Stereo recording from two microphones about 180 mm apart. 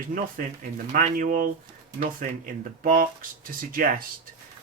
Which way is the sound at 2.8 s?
50° right (ahead or behind).